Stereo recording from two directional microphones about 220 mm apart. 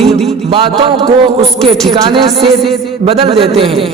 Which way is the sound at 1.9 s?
25° right (ahead or behind).